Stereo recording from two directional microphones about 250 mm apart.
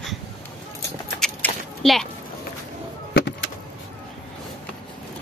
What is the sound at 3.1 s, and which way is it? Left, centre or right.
Vehicle, left.